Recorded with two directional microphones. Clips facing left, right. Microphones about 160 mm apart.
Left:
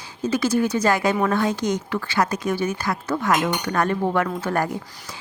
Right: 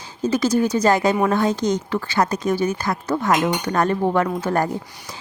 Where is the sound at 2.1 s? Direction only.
40° right (ahead or behind).